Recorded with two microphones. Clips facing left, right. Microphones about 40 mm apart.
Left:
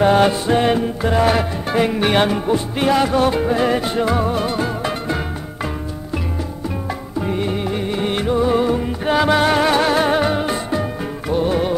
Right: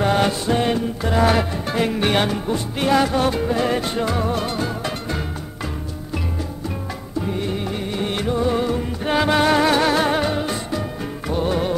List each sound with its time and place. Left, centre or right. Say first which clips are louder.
0.0 s music: left 5 dB; centre
1.1 s music: even; centre
7.2 s music: left 3 dB; left; by 10.2 s centre
10.2 s music: left 3 dB; left
11.2 s music: left 3 dB; centre